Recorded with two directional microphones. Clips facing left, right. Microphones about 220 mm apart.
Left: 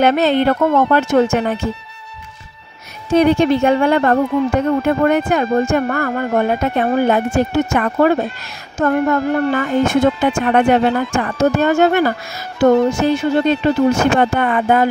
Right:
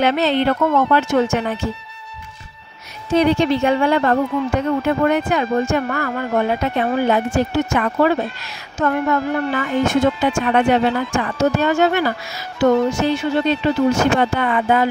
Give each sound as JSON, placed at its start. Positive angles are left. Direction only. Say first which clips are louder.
{"t": 0.0, "sound": "speech", "louder": "left 3 dB", "side_deg": 50}
{"t": 3.1, "sound": "speech", "louder": "left 3 dB", "side_deg": 50}